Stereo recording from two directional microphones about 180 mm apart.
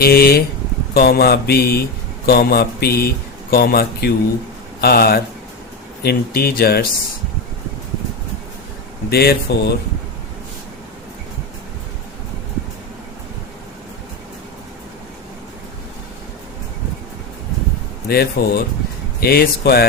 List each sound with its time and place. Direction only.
0.0 s speech: 60° left (ahead or behind)
9.0 s speech: 60° left (ahead or behind)
18.1 s speech: 60° left (ahead or behind)